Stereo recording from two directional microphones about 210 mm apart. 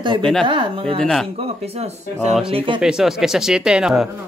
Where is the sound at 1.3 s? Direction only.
30° right (ahead or behind).